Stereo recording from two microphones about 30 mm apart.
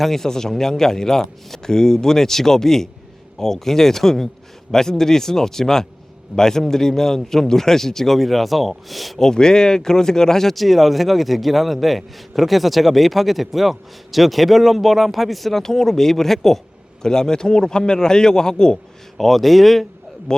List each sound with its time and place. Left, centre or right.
0.0 s a man's voice: centre
9.3 s a man's voice: left
10.5 s a man's voice: centre
15.6 s a man's voice: centre
17.0 s a man's voice: left
19.1 s a man's voice: centre